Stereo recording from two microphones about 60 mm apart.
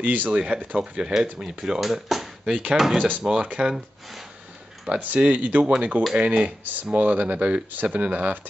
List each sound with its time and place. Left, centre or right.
0.0 s speech: right
0.3 s speech: centre
4.8 s speech: right